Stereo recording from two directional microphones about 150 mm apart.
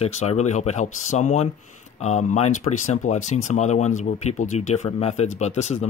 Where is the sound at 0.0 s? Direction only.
45° left (ahead or behind).